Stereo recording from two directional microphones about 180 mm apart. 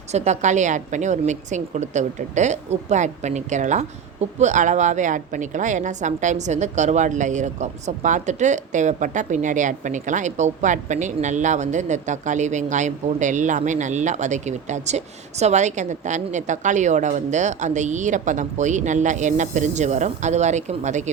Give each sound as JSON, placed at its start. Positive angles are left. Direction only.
{"t": 0.1, "sound": "a woman's voice", "side_deg": -40}